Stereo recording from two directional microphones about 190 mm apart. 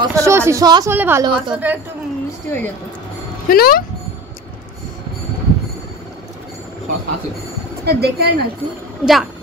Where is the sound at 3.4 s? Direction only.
50° left (ahead or behind).